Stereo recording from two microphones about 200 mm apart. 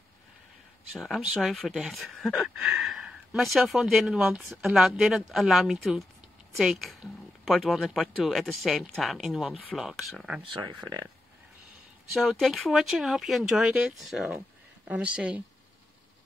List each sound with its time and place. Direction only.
0.9 s speech: centre (ahead or behind)
10.6 s speech: 20° right (ahead or behind)
12.1 s speech: centre (ahead or behind)